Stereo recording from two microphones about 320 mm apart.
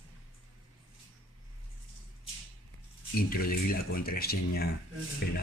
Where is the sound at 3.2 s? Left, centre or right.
Left.